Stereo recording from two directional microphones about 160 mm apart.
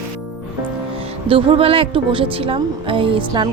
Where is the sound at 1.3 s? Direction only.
35° right (ahead or behind).